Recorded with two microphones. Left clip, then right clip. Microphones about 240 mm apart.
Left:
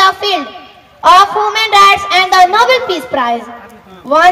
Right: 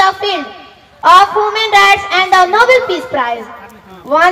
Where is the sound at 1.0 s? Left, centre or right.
Left.